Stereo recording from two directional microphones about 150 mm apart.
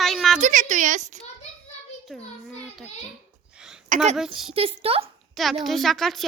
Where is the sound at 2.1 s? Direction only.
Centre (ahead or behind).